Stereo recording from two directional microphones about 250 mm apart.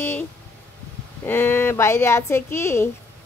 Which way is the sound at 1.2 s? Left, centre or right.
Centre.